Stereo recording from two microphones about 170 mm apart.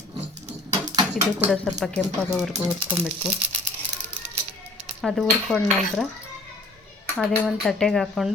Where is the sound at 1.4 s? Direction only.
Centre (ahead or behind).